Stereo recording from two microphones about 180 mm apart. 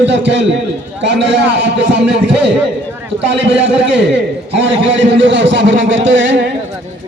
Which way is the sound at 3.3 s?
80° right.